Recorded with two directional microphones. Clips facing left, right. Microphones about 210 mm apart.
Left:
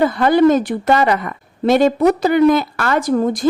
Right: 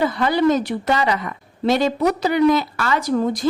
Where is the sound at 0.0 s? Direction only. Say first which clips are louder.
Left 5 dB; 50° left (ahead or behind).